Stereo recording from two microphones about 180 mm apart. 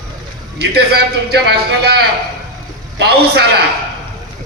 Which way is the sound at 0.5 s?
65° right (ahead or behind).